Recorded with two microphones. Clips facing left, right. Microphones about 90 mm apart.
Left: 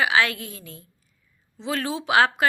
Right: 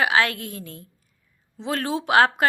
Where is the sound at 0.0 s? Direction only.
50° right (ahead or behind).